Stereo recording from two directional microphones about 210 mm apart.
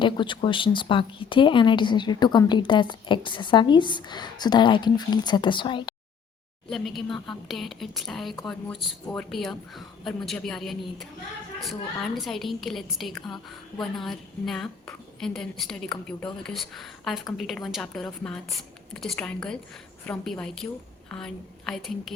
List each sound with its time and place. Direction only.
0.0 s speech: 20° left (ahead or behind)
6.7 s a woman's voice: centre (ahead or behind)